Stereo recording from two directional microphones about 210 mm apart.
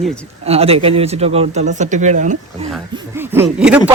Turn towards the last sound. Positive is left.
turn(degrees=-5)  # may be behind; listen again after turning